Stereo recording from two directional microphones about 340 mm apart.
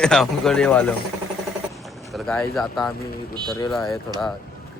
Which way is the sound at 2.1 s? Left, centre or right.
Centre.